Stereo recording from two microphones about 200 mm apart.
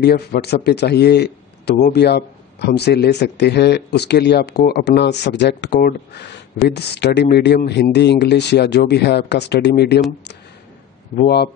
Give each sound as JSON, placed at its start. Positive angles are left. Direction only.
{"t": 0.0, "sound": "a man's voice", "side_deg": 55}
{"t": 11.1, "sound": "speech", "side_deg": 55}